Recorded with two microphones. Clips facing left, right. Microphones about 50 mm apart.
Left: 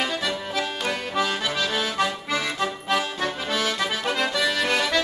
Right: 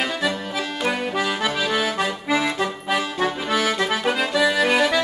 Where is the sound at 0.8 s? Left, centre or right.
Centre.